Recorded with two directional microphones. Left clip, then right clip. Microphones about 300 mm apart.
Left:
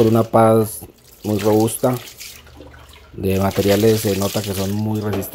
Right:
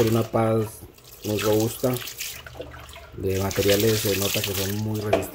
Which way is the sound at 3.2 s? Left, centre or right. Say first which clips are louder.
Left 6 dB; centre.